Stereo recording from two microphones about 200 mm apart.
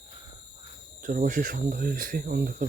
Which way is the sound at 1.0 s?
45° right (ahead or behind).